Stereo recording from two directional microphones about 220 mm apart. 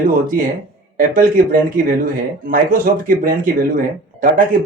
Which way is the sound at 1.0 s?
40° right (ahead or behind).